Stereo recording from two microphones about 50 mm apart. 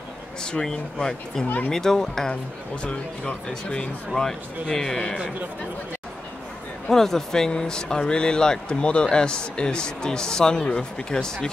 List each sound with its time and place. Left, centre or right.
0.4 s a man's voice: centre
2.7 s speech: left
4.1 s a man's voice: centre
6.9 s a man's voice: centre